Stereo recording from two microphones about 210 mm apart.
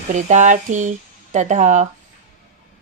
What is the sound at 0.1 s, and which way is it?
Speech, 35° right (ahead or behind).